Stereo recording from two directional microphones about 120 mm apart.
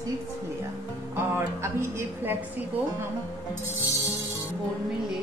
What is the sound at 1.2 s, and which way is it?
A woman's voice, 20° right (ahead or behind).